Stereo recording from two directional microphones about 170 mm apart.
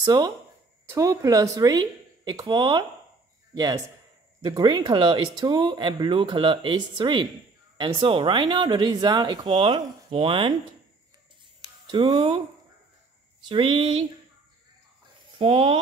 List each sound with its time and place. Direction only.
0.0 s speech: 25° right (ahead or behind)
4.4 s speech: 25° right (ahead or behind)
11.6 s a sound: 25° right (ahead or behind)
13.5 s speech: 30° right (ahead or behind)
15.3 s speech: 35° right (ahead or behind)